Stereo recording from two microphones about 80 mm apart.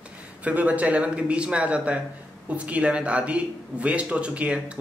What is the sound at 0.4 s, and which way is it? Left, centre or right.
A man's voice, centre.